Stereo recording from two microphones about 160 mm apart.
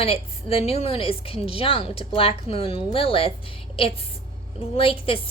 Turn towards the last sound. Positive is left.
turn(degrees=35)  # may be behind; listen again after turning